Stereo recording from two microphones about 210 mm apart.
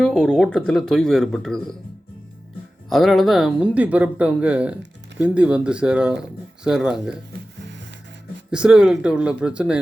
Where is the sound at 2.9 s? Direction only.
Centre (ahead or behind).